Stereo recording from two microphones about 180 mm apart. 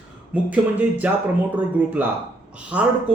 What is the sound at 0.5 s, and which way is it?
Speech, 10° right (ahead or behind).